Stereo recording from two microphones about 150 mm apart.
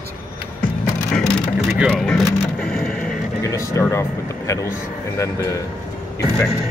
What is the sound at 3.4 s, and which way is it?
Speech, 20° left (ahead or behind).